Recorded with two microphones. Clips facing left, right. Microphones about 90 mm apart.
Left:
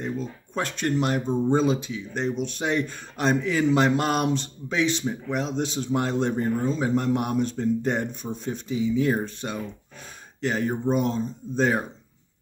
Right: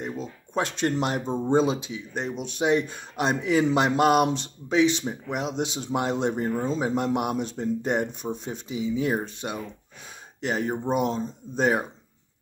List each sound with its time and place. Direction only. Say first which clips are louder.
0.0 s speech: left 2 dB; 20° right (ahead or behind)
2.1 s speech: left 2 dB; 10° right (ahead or behind)